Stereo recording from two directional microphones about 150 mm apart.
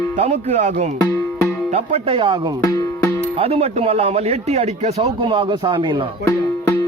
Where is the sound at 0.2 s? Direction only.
50° right (ahead or behind).